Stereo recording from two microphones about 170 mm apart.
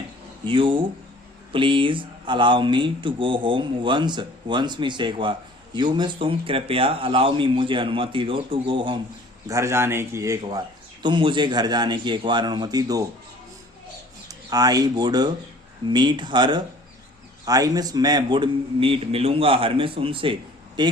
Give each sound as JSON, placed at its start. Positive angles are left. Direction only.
{"t": 0.4, "sound": "speech", "side_deg": -30}
{"t": 9.5, "sound": "a man's voice", "side_deg": -15}
{"t": 14.3, "sound": "a man's voice", "side_deg": -20}